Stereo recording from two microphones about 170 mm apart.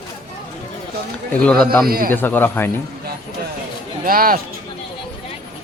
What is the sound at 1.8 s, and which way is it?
Speech, 60° right (ahead or behind).